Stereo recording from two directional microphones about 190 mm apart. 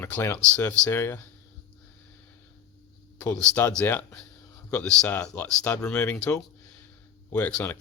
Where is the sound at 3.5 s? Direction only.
10° left (ahead or behind).